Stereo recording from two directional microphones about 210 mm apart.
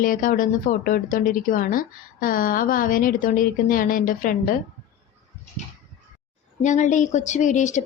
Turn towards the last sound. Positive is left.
turn(degrees=35)  # may be behind; listen again after turning